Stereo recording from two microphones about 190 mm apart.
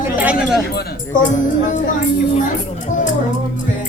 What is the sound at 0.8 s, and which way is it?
Speech, 40° left (ahead or behind).